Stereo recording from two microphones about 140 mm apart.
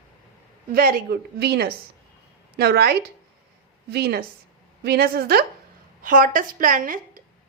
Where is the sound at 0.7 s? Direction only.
90° right.